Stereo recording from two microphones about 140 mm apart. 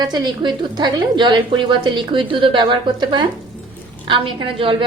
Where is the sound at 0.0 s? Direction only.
30° right (ahead or behind).